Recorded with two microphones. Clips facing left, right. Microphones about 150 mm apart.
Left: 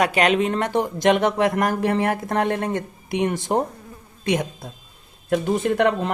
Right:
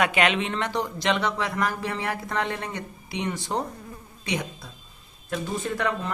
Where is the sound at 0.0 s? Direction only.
40° left (ahead or behind).